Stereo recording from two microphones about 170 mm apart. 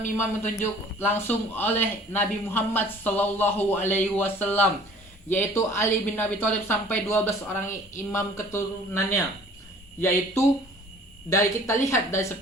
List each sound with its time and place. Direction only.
0.6 s speech: 15° left (ahead or behind)
11.3 s speech: 20° left (ahead or behind)